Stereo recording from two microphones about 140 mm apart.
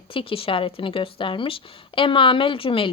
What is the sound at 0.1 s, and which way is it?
A woman's voice, 40° left (ahead or behind).